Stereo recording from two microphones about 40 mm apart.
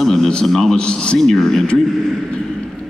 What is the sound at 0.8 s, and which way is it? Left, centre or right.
Speech, left.